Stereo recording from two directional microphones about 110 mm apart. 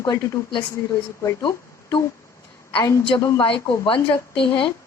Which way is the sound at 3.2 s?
35° left (ahead or behind).